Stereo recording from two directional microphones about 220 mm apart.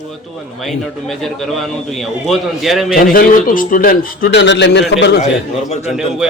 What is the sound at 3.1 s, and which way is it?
A man's voice, 40° left (ahead or behind).